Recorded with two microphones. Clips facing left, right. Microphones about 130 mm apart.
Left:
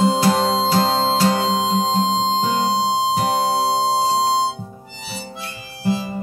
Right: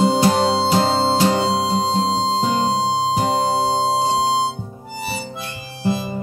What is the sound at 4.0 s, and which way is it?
Music, 30° left (ahead or behind).